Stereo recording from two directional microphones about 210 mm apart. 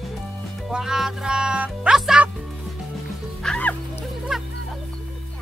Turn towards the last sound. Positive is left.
turn(degrees=0)  # may be behind; listen again after turning